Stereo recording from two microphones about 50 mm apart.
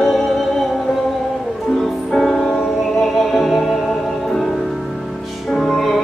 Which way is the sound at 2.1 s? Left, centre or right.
Centre.